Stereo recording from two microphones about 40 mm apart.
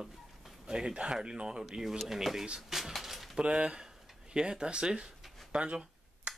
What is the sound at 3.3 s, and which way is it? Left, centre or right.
Speech, right.